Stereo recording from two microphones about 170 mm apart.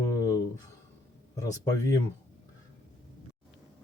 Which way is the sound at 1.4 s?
20° left (ahead or behind).